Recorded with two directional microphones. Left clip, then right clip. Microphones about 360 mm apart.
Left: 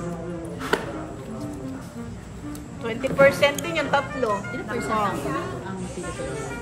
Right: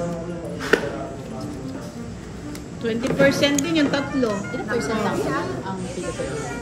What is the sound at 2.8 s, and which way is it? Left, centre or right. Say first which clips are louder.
A man's voice: left 1 dB; centre.